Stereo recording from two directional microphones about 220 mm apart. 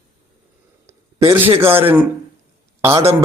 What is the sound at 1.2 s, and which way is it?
Speech, 25° right (ahead or behind).